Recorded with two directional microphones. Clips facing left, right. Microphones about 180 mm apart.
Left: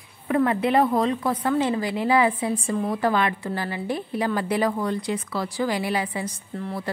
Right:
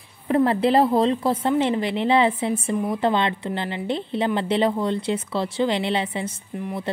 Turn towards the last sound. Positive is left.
turn(degrees=-20)  # may be behind; listen again after turning